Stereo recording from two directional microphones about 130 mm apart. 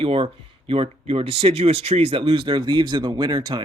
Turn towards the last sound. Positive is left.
turn(degrees=-35)  # may be behind; listen again after turning